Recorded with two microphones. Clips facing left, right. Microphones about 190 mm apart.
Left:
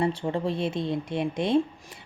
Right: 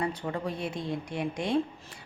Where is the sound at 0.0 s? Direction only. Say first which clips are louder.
Left 5 dB; 25° left (ahead or behind).